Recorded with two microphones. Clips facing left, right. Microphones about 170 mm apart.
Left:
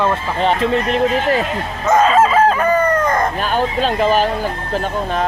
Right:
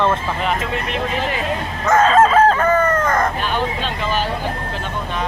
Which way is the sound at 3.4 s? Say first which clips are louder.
Left 4 dB; 45° left (ahead or behind).